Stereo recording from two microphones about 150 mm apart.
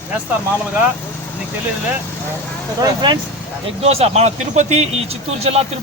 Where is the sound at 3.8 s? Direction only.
45° right (ahead or behind).